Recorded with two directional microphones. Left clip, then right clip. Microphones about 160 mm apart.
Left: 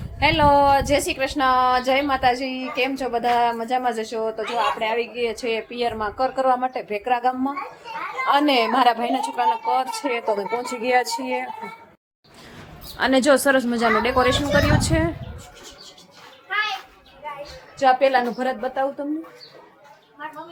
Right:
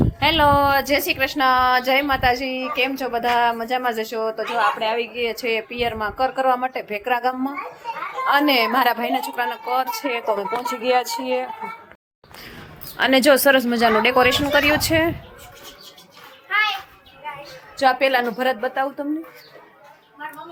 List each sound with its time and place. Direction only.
0.2 s a woman's voice: 5° left (ahead or behind)
13.0 s speech: 5° right (ahead or behind)
17.7 s speech: 20° right (ahead or behind)